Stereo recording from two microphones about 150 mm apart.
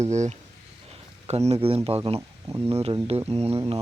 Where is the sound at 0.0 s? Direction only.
50° right (ahead or behind).